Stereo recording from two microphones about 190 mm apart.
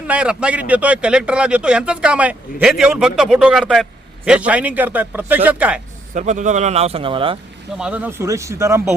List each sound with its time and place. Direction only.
0.1 s a man's voice: 5° right (ahead or behind)
6.1 s a man's voice: 40° right (ahead or behind)
7.8 s a man's voice: 5° right (ahead or behind)